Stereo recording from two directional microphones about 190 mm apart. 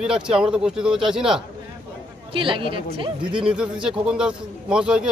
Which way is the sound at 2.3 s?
25° right (ahead or behind).